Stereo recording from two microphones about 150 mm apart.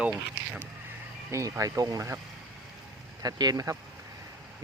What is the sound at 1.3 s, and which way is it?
Speech, 20° right (ahead or behind).